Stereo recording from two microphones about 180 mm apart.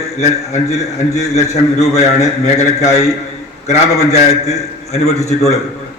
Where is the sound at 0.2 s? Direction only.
40° left (ahead or behind).